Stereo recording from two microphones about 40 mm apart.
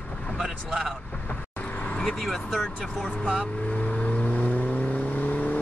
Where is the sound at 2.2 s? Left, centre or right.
Centre.